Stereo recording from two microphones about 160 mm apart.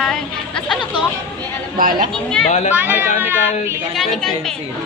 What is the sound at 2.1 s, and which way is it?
Speech, 5° left (ahead or behind).